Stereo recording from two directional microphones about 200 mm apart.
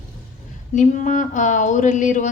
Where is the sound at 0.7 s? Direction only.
40° left (ahead or behind).